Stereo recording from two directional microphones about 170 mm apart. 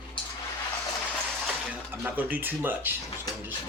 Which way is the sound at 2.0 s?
10° right (ahead or behind).